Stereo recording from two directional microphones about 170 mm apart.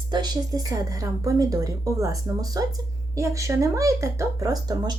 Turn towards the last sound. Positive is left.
turn(degrees=-25)  # may be behind; listen again after turning